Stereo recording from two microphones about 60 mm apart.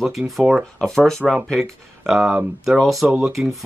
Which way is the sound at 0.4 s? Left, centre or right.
Centre.